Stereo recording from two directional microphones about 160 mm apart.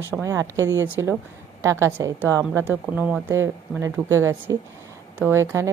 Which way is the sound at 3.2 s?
20° right (ahead or behind).